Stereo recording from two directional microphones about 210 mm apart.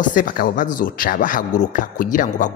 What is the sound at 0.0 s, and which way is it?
Speech, 40° left (ahead or behind).